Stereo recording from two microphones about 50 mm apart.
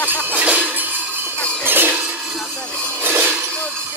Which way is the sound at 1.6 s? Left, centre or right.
Right.